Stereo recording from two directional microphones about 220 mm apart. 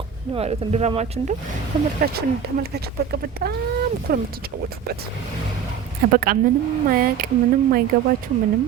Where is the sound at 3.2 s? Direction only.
45° right (ahead or behind).